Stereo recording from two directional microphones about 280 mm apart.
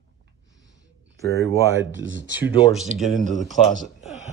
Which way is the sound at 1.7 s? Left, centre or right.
Right.